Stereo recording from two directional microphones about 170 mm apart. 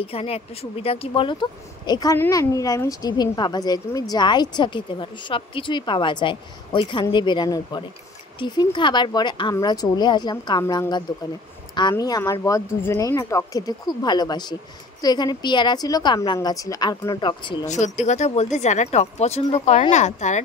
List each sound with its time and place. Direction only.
0.0 s speech: 35° left (ahead or behind)
17.6 s speech: 45° left (ahead or behind)